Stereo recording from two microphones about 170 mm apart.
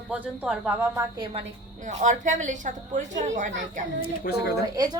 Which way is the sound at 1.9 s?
45° right (ahead or behind).